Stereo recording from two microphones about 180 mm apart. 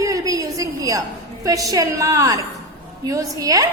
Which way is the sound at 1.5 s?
20° right (ahead or behind).